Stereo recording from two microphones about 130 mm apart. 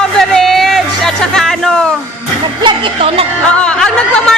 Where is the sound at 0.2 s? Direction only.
Centre (ahead or behind).